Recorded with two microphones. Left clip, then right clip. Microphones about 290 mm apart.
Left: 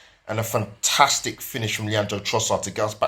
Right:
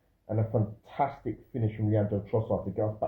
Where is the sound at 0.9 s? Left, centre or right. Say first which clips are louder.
Left 11 dB; left.